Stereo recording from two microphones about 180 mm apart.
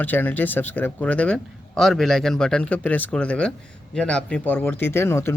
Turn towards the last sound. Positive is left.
turn(degrees=15)  # may be behind; listen again after turning